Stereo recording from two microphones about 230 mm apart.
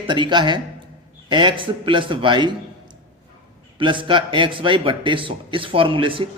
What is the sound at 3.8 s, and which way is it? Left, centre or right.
Speech, right.